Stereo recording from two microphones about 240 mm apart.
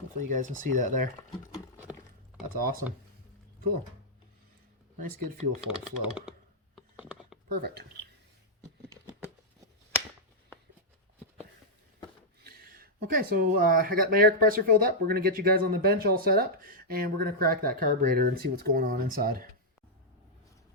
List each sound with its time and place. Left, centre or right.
0.2 s speech: right
4.9 s speech: right
5.6 s speech: centre
7.4 s speech: right
12.5 s speech: right